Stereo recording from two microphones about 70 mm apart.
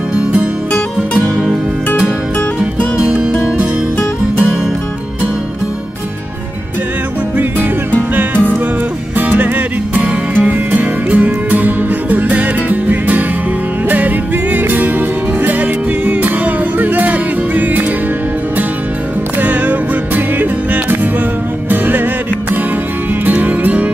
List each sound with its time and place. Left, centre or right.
3.0 s music: centre
9.2 s music: right
19.4 s music: right
23.2 s music: right